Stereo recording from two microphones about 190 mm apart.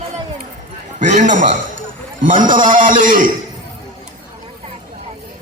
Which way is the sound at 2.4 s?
45° right (ahead or behind).